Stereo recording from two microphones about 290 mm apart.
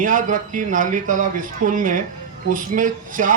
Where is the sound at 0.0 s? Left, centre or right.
Right.